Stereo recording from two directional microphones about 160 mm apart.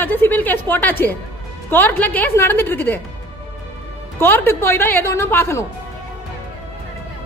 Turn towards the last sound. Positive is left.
turn(degrees=15)  # may be behind; listen again after turning